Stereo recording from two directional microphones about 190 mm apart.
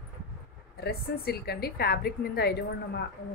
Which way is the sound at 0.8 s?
55° left (ahead or behind).